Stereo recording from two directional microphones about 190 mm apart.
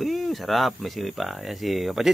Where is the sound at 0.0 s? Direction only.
Centre (ahead or behind).